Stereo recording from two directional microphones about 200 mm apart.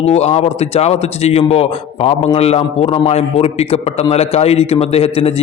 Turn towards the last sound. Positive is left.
turn(degrees=30)  # may be behind; listen again after turning